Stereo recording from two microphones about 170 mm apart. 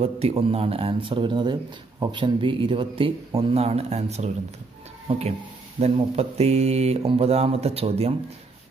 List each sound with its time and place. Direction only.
0.0 s speech: 35° right (ahead or behind)
5.8 s speech: 35° right (ahead or behind)